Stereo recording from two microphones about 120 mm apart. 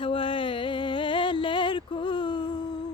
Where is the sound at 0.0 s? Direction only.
45° left (ahead or behind).